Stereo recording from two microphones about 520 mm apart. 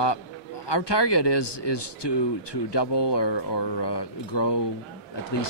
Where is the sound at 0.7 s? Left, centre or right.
Left.